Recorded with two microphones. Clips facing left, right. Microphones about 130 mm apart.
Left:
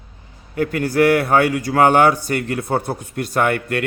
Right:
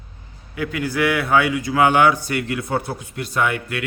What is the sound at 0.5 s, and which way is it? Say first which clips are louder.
A man's voice: left 5 dB; 45° left (ahead or behind).